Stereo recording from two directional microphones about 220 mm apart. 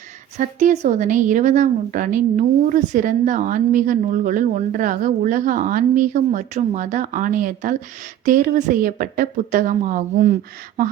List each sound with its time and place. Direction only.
0.3 s a woman's voice: 30° right (ahead or behind)